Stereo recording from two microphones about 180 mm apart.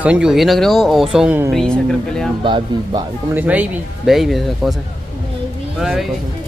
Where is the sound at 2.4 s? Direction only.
25° right (ahead or behind).